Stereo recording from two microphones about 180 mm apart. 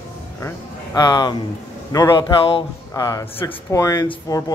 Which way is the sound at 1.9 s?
20° left (ahead or behind).